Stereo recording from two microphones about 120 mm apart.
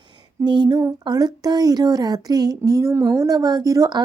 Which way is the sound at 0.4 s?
35° right (ahead or behind).